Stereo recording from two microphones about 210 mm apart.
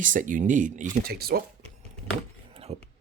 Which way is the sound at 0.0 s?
40° right (ahead or behind).